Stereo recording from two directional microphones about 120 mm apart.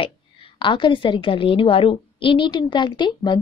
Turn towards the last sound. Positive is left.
turn(degrees=40)  # may be behind; listen again after turning